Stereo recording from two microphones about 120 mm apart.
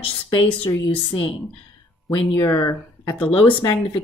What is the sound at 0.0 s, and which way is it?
A woman's voice, 50° left (ahead or behind).